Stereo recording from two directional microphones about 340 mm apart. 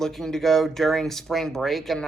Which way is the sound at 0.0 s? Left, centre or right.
Centre.